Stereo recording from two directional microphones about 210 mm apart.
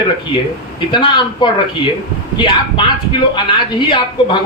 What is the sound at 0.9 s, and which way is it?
Speech, 20° left (ahead or behind).